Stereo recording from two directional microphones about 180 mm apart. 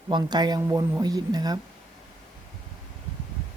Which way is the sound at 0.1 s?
25° right (ahead or behind).